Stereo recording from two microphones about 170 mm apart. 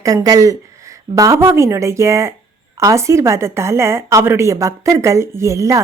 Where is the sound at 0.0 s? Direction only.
20° right (ahead or behind).